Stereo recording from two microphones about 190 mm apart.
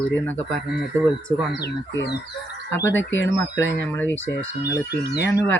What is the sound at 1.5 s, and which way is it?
Speech, 60° left (ahead or behind).